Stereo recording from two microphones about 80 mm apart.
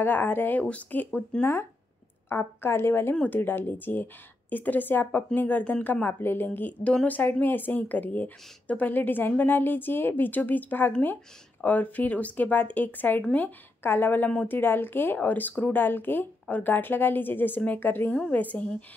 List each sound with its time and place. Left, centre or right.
0.0 s speech: left
1.4 s speech: left; by 5.9 s centre
5.9 s speech: left